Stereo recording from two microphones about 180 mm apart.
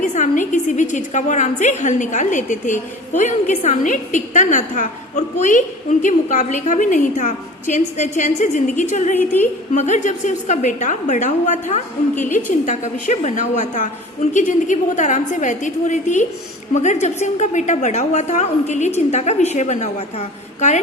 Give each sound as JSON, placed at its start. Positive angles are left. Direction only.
{"t": 0.0, "sound": "a woman's voice", "side_deg": 45}